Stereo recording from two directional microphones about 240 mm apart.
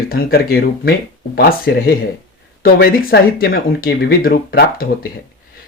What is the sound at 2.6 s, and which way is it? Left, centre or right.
Speech, left.